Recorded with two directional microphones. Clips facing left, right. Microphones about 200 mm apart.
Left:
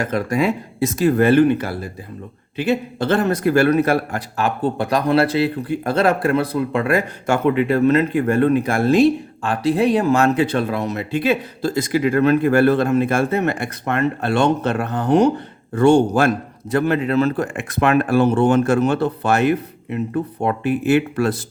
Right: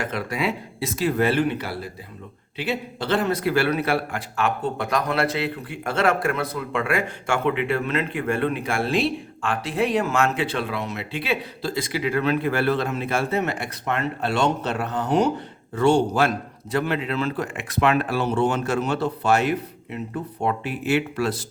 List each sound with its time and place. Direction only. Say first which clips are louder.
0.0 s a man's voice: left 7 dB; 45° left (ahead or behind)